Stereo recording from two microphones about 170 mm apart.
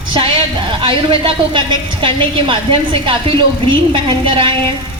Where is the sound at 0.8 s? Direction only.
30° right (ahead or behind).